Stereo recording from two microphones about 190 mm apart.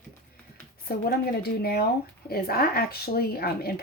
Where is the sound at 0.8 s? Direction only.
55° left (ahead or behind).